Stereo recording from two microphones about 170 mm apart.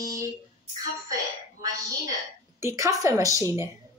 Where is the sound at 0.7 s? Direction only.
20° right (ahead or behind).